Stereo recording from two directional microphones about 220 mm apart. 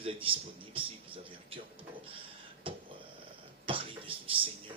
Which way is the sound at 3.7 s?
25° right (ahead or behind).